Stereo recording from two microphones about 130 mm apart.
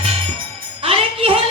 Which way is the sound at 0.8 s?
45° right (ahead or behind).